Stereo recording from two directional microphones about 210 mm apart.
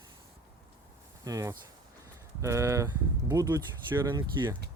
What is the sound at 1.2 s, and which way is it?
Speech, 15° right (ahead or behind).